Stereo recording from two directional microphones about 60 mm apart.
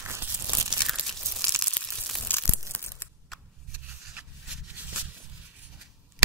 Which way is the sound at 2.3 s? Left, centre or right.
Left.